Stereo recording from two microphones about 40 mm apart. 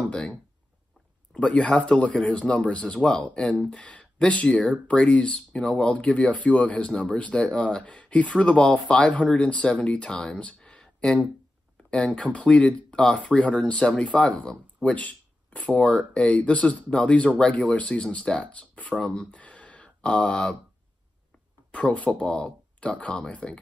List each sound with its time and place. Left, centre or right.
1.3 s speech: left
5.9 s speech: left
7.8 s speech: left
10.8 s a sound: centre
11.9 s speech: left
14.9 s a sound: left
15.7 s speech: left
19.3 s a sound: left
20.0 s speech: left
21.7 s speech: left